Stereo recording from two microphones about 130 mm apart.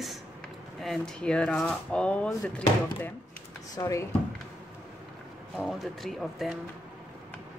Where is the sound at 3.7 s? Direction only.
25° left (ahead or behind).